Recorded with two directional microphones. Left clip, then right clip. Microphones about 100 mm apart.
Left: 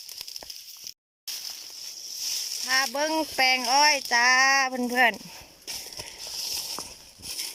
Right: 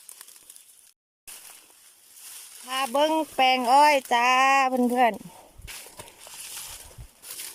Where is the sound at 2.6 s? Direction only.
30° right (ahead or behind).